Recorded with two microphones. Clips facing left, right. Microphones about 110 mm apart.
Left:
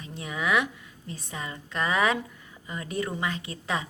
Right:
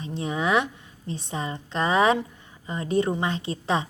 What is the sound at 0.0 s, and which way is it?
A woman's voice, 25° right (ahead or behind).